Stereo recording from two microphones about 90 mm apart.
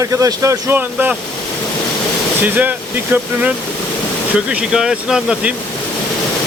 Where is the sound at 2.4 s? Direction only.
20° right (ahead or behind).